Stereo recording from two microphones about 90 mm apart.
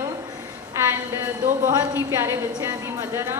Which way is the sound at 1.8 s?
25° right (ahead or behind).